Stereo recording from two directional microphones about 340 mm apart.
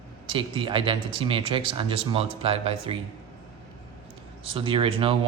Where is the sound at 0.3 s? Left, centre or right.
Centre.